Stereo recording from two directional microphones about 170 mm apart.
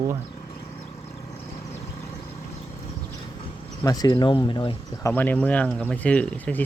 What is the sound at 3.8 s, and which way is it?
Speech, 20° left (ahead or behind).